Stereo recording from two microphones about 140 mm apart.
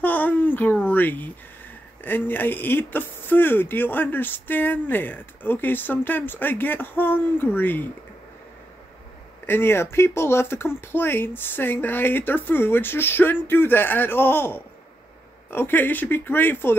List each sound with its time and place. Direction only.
0.0 s a sound: 10° left (ahead or behind)
2.0 s speech: 15° left (ahead or behind)
9.5 s speech: 15° left (ahead or behind)